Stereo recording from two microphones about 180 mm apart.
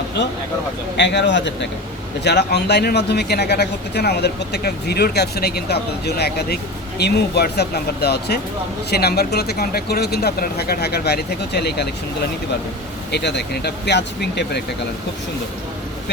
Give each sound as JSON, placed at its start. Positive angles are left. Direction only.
{"t": 0.9, "sound": "speech", "side_deg": 80}
{"t": 13.1, "sound": "speech", "side_deg": 70}